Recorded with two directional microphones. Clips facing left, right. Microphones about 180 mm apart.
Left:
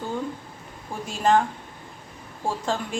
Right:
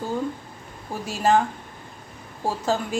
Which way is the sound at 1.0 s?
5° right (ahead or behind).